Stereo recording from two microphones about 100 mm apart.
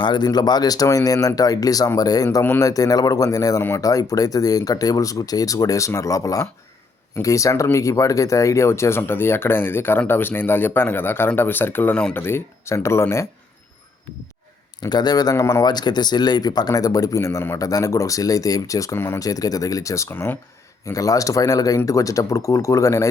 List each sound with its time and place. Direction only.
0.0 s speech: 45° left (ahead or behind); by 13.2 s 25° left (ahead or behind)
14.8 s speech: 45° left (ahead or behind); by 19.2 s 25° left (ahead or behind)
19.2 s speech: 35° left (ahead or behind)
20.8 s speech: 35° left (ahead or behind)